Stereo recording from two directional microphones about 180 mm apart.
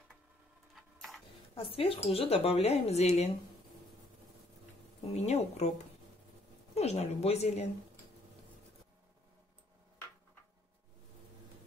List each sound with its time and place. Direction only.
0.7 s a sound: centre (ahead or behind)
1.5 s speech: 30° left (ahead or behind)
5.0 s speech: 35° left (ahead or behind)
6.7 s speech: 35° left (ahead or behind)